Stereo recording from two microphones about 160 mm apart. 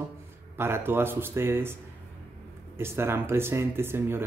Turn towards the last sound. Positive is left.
turn(degrees=-15)  # may be behind; listen again after turning